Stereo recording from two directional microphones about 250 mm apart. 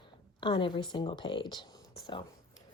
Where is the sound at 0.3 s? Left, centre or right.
Centre.